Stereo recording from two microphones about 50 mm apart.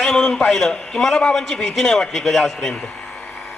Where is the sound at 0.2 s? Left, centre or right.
Centre.